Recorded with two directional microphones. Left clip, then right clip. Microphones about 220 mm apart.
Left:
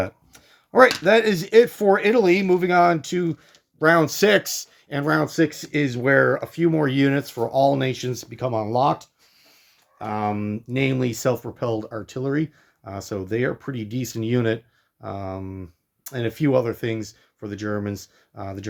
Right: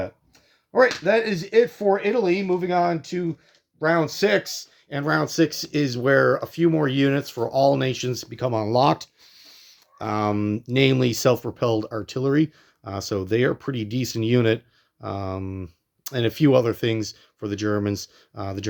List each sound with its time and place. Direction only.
0.0 s speech: 35° left (ahead or behind)
4.9 s speech: 10° left (ahead or behind); by 9.6 s 35° right (ahead or behind)
10.0 s speech: 50° right (ahead or behind)